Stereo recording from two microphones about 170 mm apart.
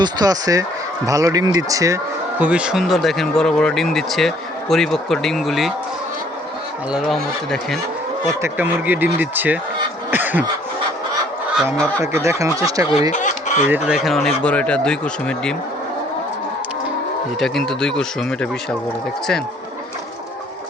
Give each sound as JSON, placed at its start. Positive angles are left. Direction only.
{"t": 0.0, "sound": "speech", "side_deg": -20}
{"t": 2.4, "sound": "speech", "side_deg": -5}
{"t": 6.9, "sound": "speech", "side_deg": 0}
{"t": 8.3, "sound": "speech", "side_deg": -15}
{"t": 10.1, "sound": "cough", "side_deg": -10}
{"t": 12.1, "sound": "speech", "side_deg": -15}
{"t": 12.9, "sound": "speech", "side_deg": 40}
{"t": 13.7, "sound": "speech", "side_deg": -10}
{"t": 17.4, "sound": "speech", "side_deg": 0}